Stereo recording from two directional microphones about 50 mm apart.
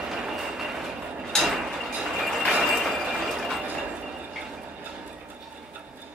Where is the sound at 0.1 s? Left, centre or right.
Centre.